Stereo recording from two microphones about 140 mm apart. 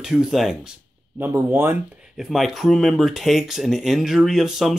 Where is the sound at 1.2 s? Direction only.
15° right (ahead or behind).